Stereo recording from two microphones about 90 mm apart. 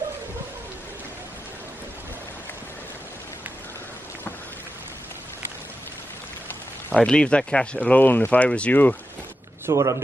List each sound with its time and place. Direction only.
6.9 s speech: 10° left (ahead or behind)
9.7 s speech: 35° right (ahead or behind)